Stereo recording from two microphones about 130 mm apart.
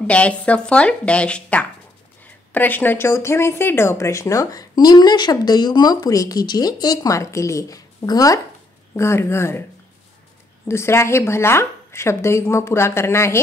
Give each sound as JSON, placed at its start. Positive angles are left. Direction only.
{"t": 0.0, "sound": "a woman's voice", "side_deg": 10}
{"t": 10.7, "sound": "a woman's voice", "side_deg": 20}